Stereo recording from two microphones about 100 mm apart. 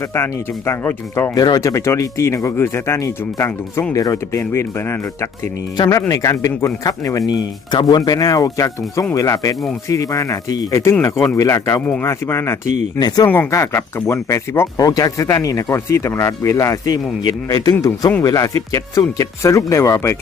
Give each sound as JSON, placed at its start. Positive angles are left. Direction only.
{"t": 0.1, "sound": "speech", "side_deg": 25}
{"t": 1.4, "sound": "speech", "side_deg": 35}
{"t": 13.0, "sound": "speech", "side_deg": 45}
{"t": 13.2, "sound": "speech", "side_deg": 20}
{"t": 13.5, "sound": "speech", "side_deg": 30}
{"t": 14.8, "sound": "speech", "side_deg": 40}
{"t": 18.2, "sound": "speech", "side_deg": 35}